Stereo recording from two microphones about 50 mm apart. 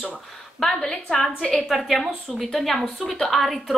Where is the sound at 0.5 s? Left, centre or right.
Centre.